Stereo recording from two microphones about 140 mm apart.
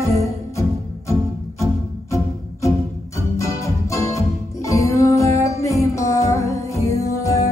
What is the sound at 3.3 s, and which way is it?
Music, 20° left (ahead or behind).